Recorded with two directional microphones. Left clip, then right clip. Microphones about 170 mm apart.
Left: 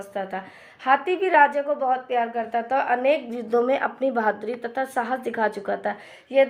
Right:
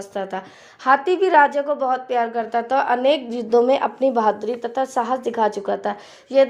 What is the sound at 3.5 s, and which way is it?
A woman's voice, 20° right (ahead or behind).